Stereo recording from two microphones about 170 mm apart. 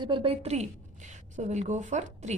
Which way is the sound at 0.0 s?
30° right (ahead or behind).